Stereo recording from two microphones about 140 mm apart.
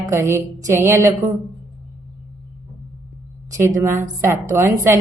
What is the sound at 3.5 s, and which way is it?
A woman's voice, 20° right (ahead or behind).